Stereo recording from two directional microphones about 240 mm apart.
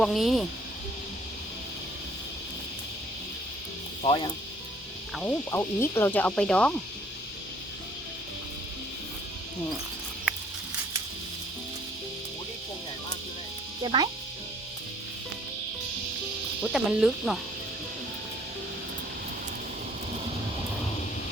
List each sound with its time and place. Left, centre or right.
0.0 s insect: centre
4.0 s speech: left
5.1 s insect: centre
13.8 s speech: centre
16.7 s insect: centre